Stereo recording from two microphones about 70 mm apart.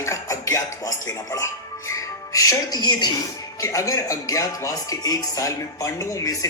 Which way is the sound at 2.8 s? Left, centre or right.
Left.